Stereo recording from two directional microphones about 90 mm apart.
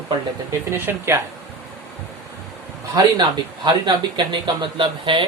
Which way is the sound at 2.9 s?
55° right (ahead or behind).